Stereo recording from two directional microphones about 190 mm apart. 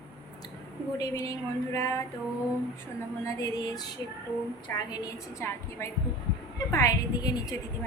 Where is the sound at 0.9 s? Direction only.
20° left (ahead or behind).